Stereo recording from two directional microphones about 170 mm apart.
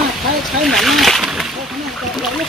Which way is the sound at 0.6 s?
Centre (ahead or behind).